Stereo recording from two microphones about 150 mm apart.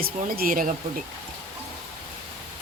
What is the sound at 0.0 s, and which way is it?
Speech, 75° right (ahead or behind).